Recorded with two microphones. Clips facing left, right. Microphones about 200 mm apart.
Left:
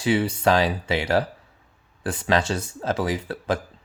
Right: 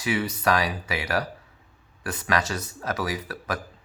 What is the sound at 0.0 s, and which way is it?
Speech, 30° left (ahead or behind).